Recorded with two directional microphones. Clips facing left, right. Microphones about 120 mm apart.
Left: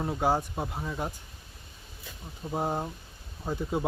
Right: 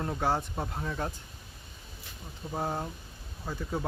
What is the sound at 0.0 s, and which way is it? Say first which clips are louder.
Speech: left 3 dB; 10° left (ahead or behind).